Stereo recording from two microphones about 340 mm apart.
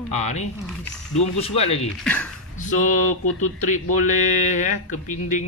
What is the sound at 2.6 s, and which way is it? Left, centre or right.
A man's voice, left.